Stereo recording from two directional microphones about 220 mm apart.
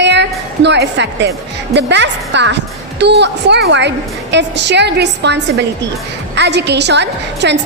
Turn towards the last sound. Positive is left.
turn(degrees=-50)  # may be behind; listen again after turning